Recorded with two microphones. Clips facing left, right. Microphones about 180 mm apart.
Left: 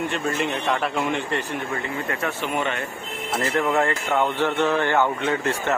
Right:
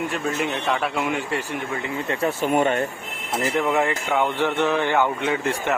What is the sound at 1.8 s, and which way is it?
Speech, 25° right (ahead or behind).